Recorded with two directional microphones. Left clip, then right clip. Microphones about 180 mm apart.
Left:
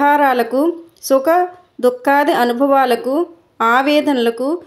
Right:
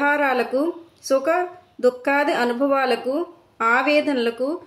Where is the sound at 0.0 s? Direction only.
35° left (ahead or behind).